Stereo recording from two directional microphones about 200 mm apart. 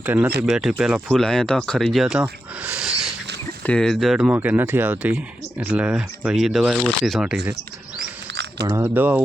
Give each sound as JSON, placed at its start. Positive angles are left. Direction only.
{"t": 0.0, "sound": "speech", "side_deg": -10}
{"t": 8.3, "sound": "a sound", "side_deg": -60}
{"t": 8.6, "sound": "speech", "side_deg": -15}